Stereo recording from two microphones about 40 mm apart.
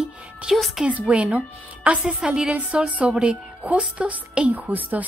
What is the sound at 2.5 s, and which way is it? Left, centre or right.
A woman's voice, right.